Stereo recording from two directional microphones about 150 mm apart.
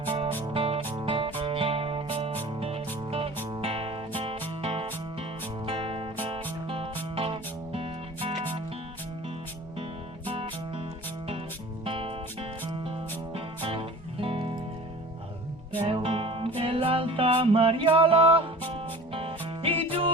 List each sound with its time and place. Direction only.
0.5 s music: 40° right (ahead or behind)
10.2 s music: 35° right (ahead or behind)
11.9 s music: 35° right (ahead or behind)
15.8 s music: 35° right (ahead or behind)